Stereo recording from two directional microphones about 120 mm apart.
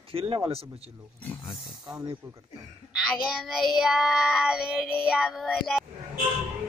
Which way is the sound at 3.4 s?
5° right (ahead or behind).